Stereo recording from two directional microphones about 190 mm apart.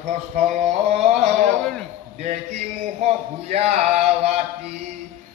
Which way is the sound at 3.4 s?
35° right (ahead or behind).